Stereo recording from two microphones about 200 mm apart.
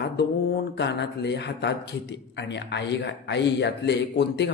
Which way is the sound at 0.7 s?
60° left (ahead or behind).